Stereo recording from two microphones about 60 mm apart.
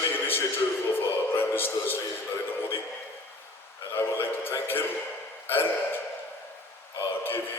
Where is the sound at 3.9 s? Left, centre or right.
Left.